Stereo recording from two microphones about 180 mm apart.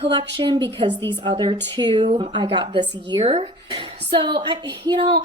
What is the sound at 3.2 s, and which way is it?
A woman's voice, 35° right (ahead or behind).